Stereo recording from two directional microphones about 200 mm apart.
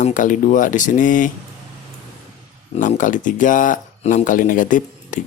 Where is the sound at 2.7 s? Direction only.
40° left (ahead or behind).